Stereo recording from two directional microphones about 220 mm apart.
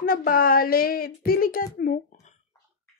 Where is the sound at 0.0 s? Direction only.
40° left (ahead or behind).